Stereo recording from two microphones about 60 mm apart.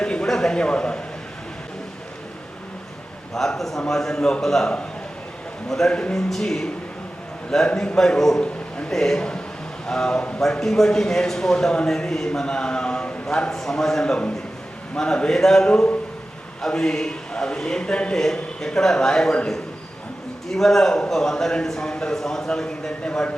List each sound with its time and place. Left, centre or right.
0.0 s a sound: centre
3.3 s a man's voice: centre
5.9 s speech: centre
6.1 s speech: centre
10.4 s speech: centre
20.5 s a man's voice: centre